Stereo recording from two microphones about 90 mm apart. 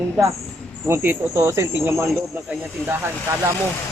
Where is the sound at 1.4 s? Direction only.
35° right (ahead or behind).